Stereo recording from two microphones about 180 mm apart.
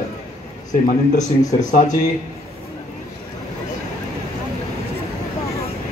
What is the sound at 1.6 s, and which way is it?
Speech, 45° left (ahead or behind).